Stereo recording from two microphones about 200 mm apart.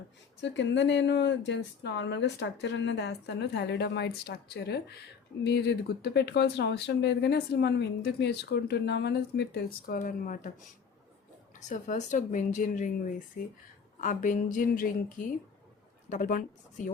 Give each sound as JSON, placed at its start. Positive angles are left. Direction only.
{"t": 0.4, "sound": "speech", "side_deg": 65}
{"t": 11.7, "sound": "a woman's voice", "side_deg": 40}